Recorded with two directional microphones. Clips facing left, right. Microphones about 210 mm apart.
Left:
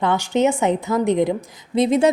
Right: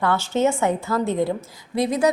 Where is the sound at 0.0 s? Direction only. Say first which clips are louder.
Left 2 dB; 20° left (ahead or behind).